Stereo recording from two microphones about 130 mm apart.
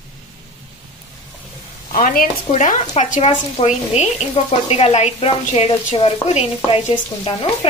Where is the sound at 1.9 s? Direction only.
80° left; by 7.5 s 45° left (ahead or behind).